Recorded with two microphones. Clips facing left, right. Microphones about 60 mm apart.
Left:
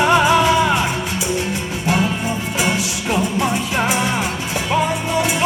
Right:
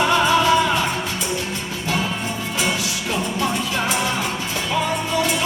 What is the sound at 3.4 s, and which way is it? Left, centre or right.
Music, left.